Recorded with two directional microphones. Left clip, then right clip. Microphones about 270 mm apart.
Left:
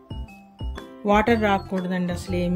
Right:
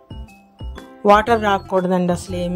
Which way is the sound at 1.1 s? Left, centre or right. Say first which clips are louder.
Right 6 dB; centre.